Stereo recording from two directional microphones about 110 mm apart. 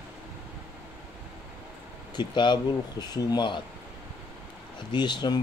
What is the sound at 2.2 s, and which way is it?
Speech, 45° left (ahead or behind).